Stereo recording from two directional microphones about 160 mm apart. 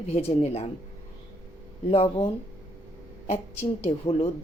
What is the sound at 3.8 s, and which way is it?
Speech, 40° left (ahead or behind).